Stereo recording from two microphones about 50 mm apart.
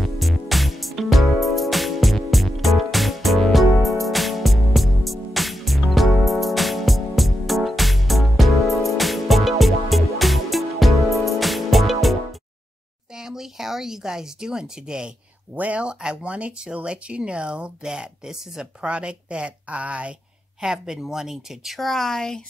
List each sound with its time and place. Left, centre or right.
0.0 s music: centre
13.1 s a sound: centre
15.5 s speech: right
20.6 s speech: centre
21.7 s speech: centre